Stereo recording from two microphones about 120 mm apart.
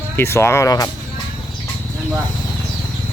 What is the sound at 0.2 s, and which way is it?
Speech, 20° left (ahead or behind).